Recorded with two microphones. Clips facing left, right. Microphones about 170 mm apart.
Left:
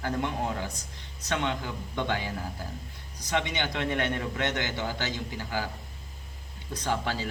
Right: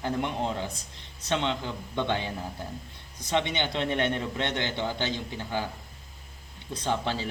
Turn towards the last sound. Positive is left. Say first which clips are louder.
# right 1 dB
turn(degrees=-20)  # may be behind; listen again after turning